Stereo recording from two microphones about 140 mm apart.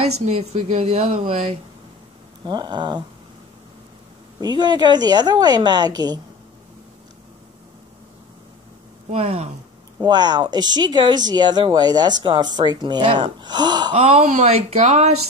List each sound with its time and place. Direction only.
0.1 s speech: 50° right (ahead or behind)
2.4 s speech: 30° right (ahead or behind)
4.4 s speech: 30° right (ahead or behind)
9.1 s speech: 45° right (ahead or behind)
10.0 s speech: 30° right (ahead or behind)
13.9 s speech: 55° right (ahead or behind)